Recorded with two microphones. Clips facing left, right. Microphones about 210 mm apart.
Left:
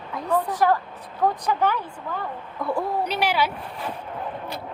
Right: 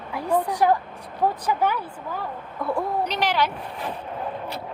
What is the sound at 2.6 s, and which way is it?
Speech, 5° left (ahead or behind).